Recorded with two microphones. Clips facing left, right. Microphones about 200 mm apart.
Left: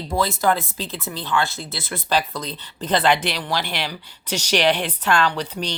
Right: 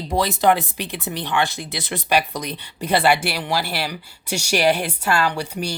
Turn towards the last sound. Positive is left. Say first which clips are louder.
# even
turn(degrees=-10)  # may be behind; listen again after turning